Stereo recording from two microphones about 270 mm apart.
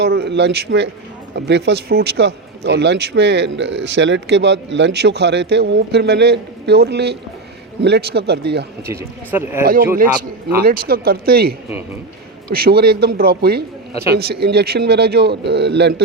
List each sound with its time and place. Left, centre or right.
0.0 s a man's voice: right
8.9 s speech: centre
10.6 s a man's voice: right